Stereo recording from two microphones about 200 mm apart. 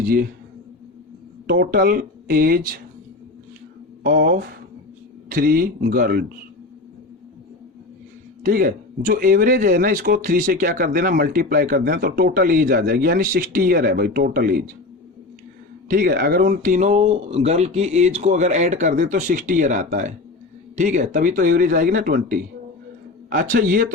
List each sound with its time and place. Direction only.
0.0 s speech: 45° right (ahead or behind)
1.5 s speech: 50° right (ahead or behind)
4.0 s speech: 45° right (ahead or behind)
8.4 s speech: 45° right (ahead or behind)
15.9 s speech: 45° right (ahead or behind)